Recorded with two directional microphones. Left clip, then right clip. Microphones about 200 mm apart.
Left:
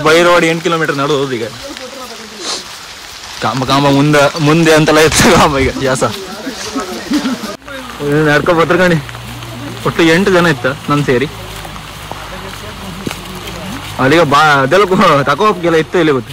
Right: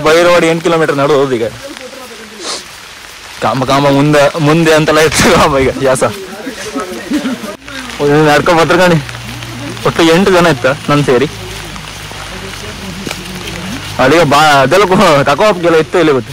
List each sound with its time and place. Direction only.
0.0 s a man's voice: 5° left (ahead or behind)
3.4 s a man's voice: 5° left (ahead or behind)
8.1 s speech: 20° right (ahead or behind)
9.9 s speech: 10° right (ahead or behind)
14.3 s speech: 10° right (ahead or behind)
15.3 s a man's voice: 5° right (ahead or behind)